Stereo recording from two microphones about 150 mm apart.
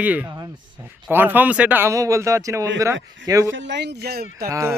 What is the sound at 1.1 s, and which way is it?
Speech, 15° right (ahead or behind).